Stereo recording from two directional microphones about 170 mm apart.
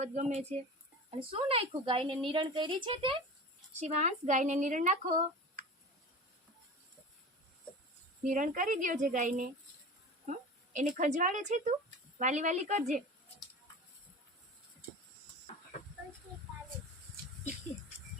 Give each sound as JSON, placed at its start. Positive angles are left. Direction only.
{"t": 0.0, "sound": "speech", "side_deg": -45}
{"t": 1.3, "sound": "a woman's voice", "side_deg": -35}
{"t": 3.8, "sound": "speech", "side_deg": -40}
{"t": 8.2, "sound": "speech", "side_deg": -50}
{"t": 10.8, "sound": "speech", "side_deg": -45}